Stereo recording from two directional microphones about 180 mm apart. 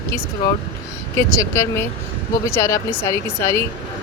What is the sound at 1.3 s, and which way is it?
Speech, 15° left (ahead or behind).